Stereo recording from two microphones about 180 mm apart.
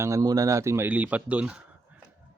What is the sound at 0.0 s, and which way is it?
Speech, 15° right (ahead or behind).